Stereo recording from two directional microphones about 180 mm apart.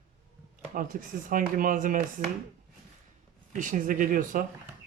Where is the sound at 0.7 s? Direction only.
50° right (ahead or behind).